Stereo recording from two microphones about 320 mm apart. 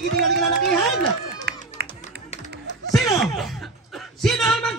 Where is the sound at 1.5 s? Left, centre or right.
Right.